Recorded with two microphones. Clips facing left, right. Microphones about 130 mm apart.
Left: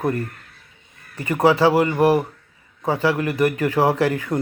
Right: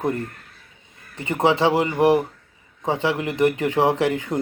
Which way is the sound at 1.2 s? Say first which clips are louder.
Left 2 dB; 20° right (ahead or behind).